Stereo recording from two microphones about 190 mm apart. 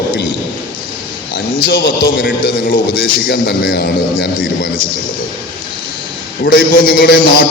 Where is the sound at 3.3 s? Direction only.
55° left (ahead or behind).